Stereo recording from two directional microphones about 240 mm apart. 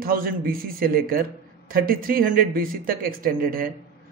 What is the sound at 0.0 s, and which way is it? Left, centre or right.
A man's voice, right.